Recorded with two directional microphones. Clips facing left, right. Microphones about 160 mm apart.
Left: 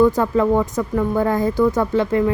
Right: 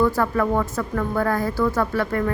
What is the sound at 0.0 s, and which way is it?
Speech, 20° left (ahead or behind).